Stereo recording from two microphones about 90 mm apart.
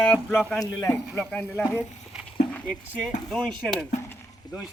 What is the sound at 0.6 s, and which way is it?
Speech, 40° left (ahead or behind).